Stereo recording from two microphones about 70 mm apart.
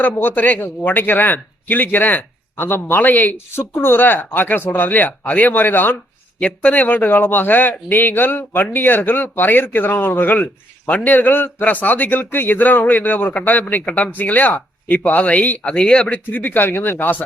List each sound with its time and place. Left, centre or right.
0.0 s a man's voice: left